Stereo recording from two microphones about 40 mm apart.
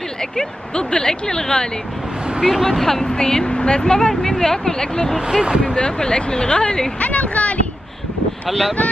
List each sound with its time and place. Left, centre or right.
0.2 s speech: centre
2.4 s speech: centre
2.8 s speech: centre
5.2 s speech: centre
5.7 s speech: left
7.0 s speech: left